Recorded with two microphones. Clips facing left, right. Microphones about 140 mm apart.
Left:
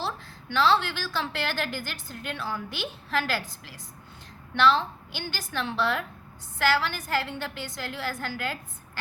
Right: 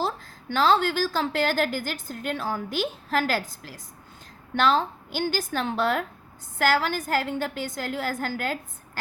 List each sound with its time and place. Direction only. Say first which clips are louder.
0.0 s a woman's voice: right 5 dB; 45° right (ahead or behind)